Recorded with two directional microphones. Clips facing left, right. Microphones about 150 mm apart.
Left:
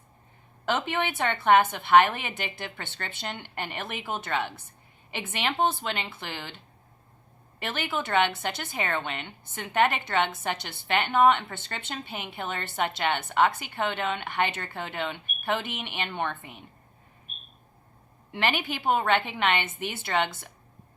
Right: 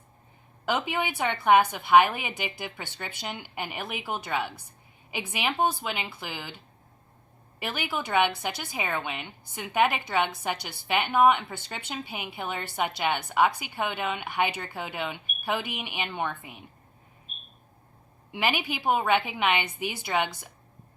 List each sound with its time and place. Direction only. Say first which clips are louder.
0.6 s a woman's voice: even; 5° right (ahead or behind)
7.6 s a woman's voice: left 1 dB; 10° right (ahead or behind)
18.3 s a woman's voice: even; 10° right (ahead or behind)